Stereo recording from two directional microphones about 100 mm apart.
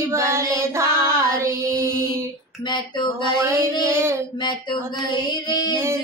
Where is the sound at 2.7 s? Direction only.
50° left (ahead or behind).